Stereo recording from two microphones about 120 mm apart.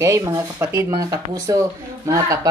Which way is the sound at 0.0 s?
25° right (ahead or behind).